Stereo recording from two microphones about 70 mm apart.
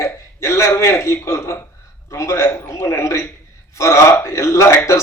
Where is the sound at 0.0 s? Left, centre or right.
Left.